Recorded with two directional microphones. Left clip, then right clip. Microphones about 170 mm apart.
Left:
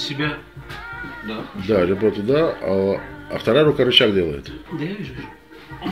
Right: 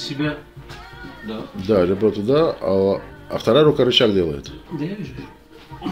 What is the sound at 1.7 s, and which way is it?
Speech, 10° right (ahead or behind).